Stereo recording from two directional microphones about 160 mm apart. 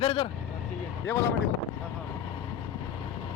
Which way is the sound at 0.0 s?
35° left (ahead or behind).